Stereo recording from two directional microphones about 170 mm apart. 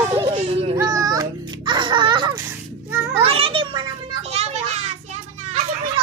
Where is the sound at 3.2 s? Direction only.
35° right (ahead or behind).